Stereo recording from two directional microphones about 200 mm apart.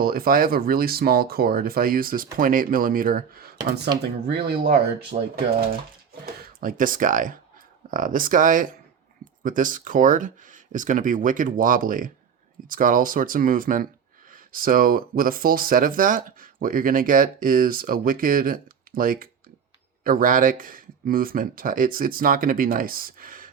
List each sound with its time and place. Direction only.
0.0 s speech: 50° right (ahead or behind)
5.1 s speech: 40° right (ahead or behind)